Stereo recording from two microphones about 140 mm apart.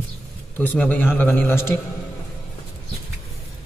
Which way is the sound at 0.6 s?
10° left (ahead or behind).